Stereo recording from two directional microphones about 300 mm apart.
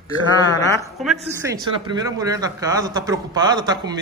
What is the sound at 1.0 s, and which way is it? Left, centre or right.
A man's voice, centre.